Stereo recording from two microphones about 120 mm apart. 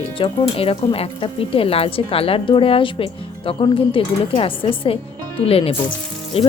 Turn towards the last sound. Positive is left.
turn(degrees=50)  # may be behind; listen again after turning